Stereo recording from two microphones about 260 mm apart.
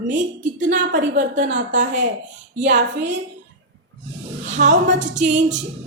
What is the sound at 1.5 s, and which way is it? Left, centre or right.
Speech, right.